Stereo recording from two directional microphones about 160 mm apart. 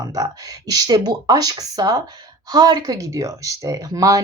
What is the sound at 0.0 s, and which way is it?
Speech, 20° right (ahead or behind).